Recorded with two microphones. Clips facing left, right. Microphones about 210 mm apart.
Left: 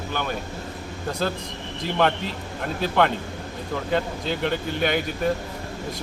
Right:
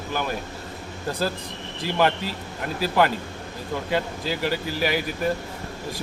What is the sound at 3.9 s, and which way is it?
Speech, 5° right (ahead or behind).